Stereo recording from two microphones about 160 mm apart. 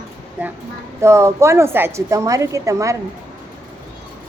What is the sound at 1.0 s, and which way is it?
A woman's voice, 15° right (ahead or behind).